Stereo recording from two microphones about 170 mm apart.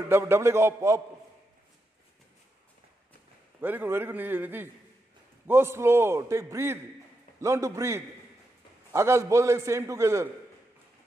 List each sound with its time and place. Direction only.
0.1 s a man's voice: 15° right (ahead or behind)
3.6 s a man's voice: 10° right (ahead or behind)